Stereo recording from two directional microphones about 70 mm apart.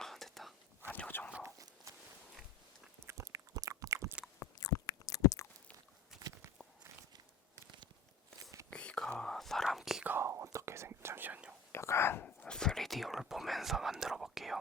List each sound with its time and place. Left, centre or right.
0.0 s whispering: centre
0.9 s a sound: left
1.5 s a sound: right
3.1 s a sound: right
4.5 s biting: left
8.7 s whispering: centre
10.2 s whispering: right
11.7 s whispering: left
12.2 s dog: left
12.5 s whispering: centre